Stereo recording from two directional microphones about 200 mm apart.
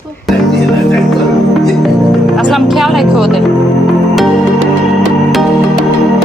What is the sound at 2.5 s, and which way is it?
Speech, centre (ahead or behind).